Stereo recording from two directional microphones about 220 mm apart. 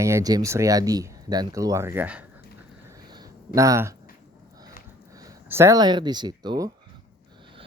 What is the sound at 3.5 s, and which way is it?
Speech, 15° right (ahead or behind).